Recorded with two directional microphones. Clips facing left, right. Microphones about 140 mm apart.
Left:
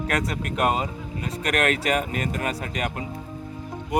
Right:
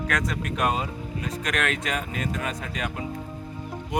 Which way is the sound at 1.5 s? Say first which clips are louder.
Left 5 dB; 40° left (ahead or behind).